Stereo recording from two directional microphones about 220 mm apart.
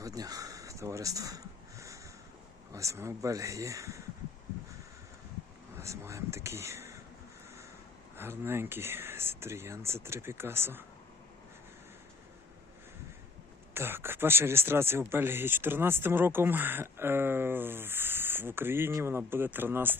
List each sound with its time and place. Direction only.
0.0 s a sound: 15° right (ahead or behind)
2.7 s speech: 15° right (ahead or behind)
5.7 s speech: 15° right (ahead or behind)
8.1 s speech: 10° right (ahead or behind)
13.7 s speech: 10° right (ahead or behind)